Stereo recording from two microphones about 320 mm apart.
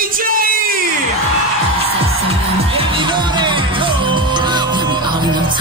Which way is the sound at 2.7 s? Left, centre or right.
Centre.